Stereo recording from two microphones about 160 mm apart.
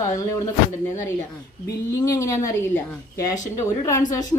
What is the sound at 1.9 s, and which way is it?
Speech, 20° left (ahead or behind).